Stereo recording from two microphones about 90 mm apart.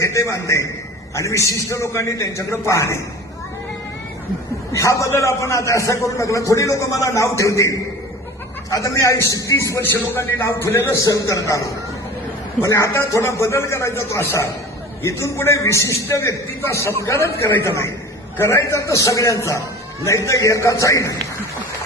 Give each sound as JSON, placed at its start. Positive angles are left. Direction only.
{"t": 0.0, "sound": "a man's voice", "side_deg": 35}
{"t": 4.7, "sound": "a man's voice", "side_deg": 35}